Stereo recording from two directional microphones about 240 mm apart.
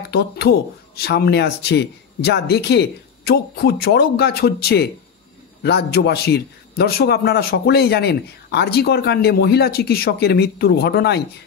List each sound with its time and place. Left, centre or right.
0.1 s a man's voice: left